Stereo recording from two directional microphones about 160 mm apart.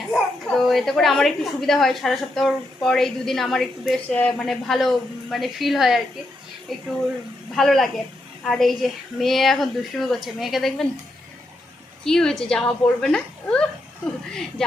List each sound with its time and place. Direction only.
0.1 s a woman's voice: centre (ahead or behind)
12.0 s a woman's voice: 5° left (ahead or behind)